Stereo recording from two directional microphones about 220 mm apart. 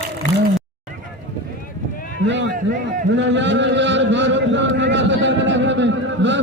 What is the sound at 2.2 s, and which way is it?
A man's voice, 55° right (ahead or behind).